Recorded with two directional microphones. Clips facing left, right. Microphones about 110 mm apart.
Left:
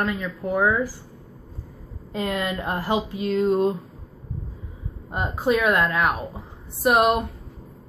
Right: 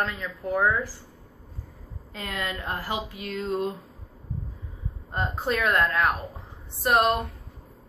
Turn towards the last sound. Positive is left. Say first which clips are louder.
# left 3 dB
turn(degrees=10)  # may be behind; listen again after turning